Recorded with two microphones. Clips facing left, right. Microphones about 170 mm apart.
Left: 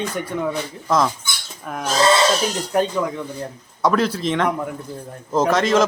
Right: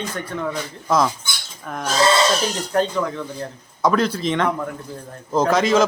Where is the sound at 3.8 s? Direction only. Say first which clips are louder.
Even; centre (ahead or behind).